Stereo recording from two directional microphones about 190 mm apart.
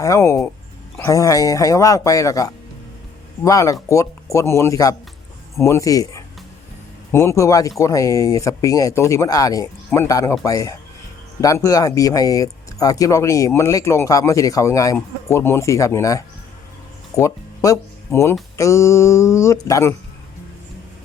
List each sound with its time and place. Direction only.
0.0 s speech: 15° left (ahead or behind)